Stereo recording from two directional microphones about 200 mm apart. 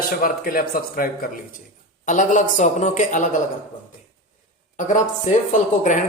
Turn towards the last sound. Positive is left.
turn(degrees=40)  # may be behind; listen again after turning